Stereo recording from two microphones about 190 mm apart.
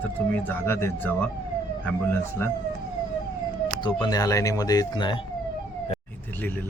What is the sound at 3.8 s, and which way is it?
Speech, 20° left (ahead or behind).